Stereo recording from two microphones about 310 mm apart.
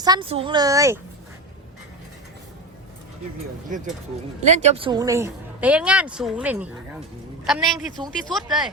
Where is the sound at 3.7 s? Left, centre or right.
Right; by 8.7 s centre.